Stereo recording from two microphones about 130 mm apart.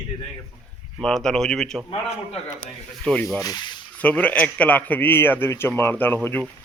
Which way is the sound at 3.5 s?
35° left (ahead or behind).